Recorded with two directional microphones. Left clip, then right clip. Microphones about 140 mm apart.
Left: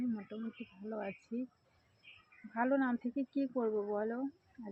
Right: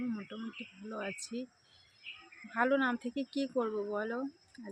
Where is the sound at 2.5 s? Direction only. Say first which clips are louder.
Right 3 dB; 20° right (ahead or behind).